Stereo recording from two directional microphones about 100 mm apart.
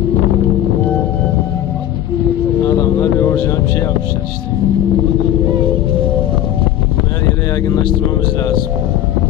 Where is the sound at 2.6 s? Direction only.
30° left (ahead or behind).